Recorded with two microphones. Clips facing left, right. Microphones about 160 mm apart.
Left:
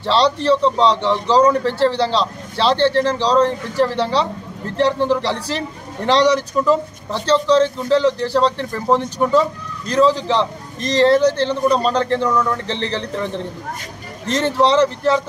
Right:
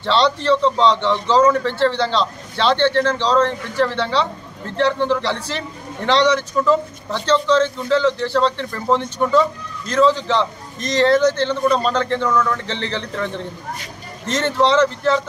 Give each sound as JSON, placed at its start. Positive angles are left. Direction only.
{"t": 0.0, "sound": "a man's voice", "side_deg": 35}
{"t": 6.6, "sound": "speech", "side_deg": 5}
{"t": 7.2, "sound": "a man's voice", "side_deg": 35}
{"t": 8.5, "sound": "speech", "side_deg": 5}
{"t": 10.0, "sound": "a man's voice", "side_deg": 35}
{"t": 12.3, "sound": "speech", "side_deg": 15}
{"t": 12.6, "sound": "a man's voice", "side_deg": 35}
{"t": 14.2, "sound": "a man's voice", "side_deg": 35}